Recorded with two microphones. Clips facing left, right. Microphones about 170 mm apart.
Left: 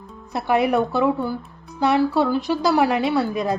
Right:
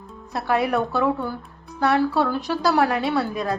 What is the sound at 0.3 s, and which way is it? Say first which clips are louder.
Speech: left 3 dB; 15° left (ahead or behind).